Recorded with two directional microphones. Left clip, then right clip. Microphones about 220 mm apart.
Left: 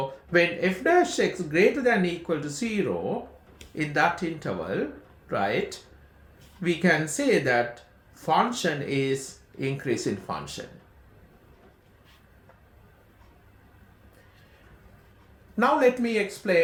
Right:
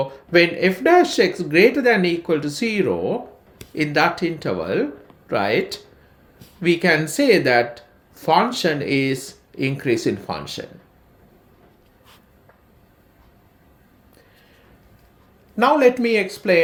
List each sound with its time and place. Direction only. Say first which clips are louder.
0.3 s speech: right 7 dB; 35° right (ahead or behind)
15.5 s speech: right 6 dB; 35° right (ahead or behind)